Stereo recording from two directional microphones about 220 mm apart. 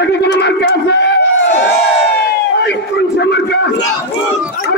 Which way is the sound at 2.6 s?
50° left (ahead or behind).